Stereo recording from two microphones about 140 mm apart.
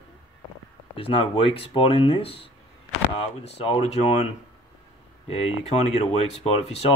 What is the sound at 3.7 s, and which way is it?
Speech, 50° left (ahead or behind).